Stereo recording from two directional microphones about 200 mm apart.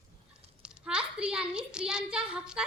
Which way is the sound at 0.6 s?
5° right (ahead or behind).